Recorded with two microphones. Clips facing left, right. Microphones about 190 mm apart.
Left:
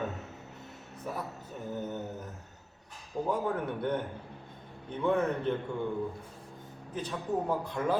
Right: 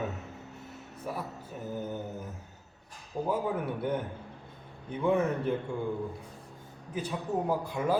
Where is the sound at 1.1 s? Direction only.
10° right (ahead or behind).